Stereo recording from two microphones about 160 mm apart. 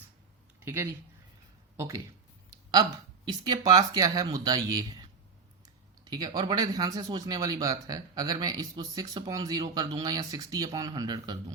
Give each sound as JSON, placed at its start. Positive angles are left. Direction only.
{"t": 0.6, "sound": "speech", "side_deg": -15}
{"t": 3.2, "sound": "speech", "side_deg": -25}
{"t": 6.1, "sound": "speech", "side_deg": -25}